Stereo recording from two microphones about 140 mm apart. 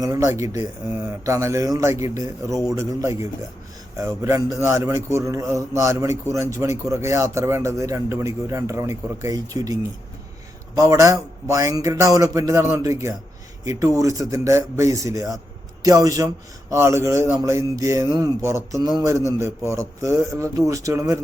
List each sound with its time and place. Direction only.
0.0 s a man's voice: 25° right (ahead or behind)
10.8 s a man's voice: 25° right (ahead or behind)